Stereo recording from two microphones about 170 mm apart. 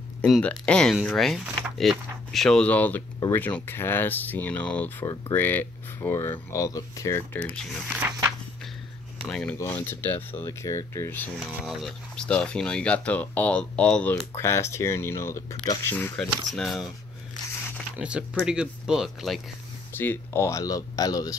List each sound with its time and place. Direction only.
0.2 s speech: 5° left (ahead or behind)
7.9 s speech: 10° right (ahead or behind)
9.2 s speech: 10° left (ahead or behind)
11.3 s speech: centre (ahead or behind)
17.9 s speech: 5° right (ahead or behind)
19.9 s speech: 10° left (ahead or behind)